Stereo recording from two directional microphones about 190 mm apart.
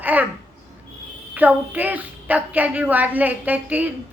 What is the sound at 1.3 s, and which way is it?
A woman's voice, 10° right (ahead or behind).